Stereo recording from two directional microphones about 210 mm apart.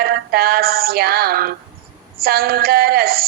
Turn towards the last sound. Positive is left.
turn(degrees=-45)  # may be behind; listen again after turning